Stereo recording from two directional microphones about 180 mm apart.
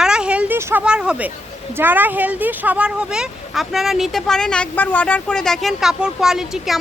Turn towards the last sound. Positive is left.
turn(degrees=0)  # may be behind; listen again after turning